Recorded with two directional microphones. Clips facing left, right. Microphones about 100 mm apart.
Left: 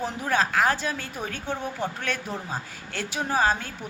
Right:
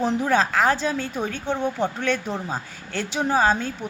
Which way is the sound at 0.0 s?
25° right (ahead or behind).